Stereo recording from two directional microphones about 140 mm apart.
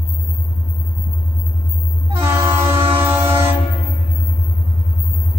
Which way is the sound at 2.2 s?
20° right (ahead or behind).